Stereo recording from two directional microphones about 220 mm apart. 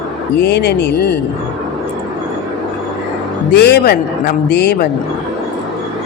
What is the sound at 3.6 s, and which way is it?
A man's voice, 50° left (ahead or behind).